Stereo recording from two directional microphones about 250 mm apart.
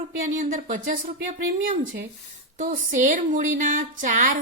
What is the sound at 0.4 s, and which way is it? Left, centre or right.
A woman's voice, right.